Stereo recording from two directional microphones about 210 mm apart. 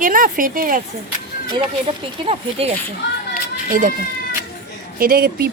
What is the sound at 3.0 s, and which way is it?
Speech, 55° left (ahead or behind).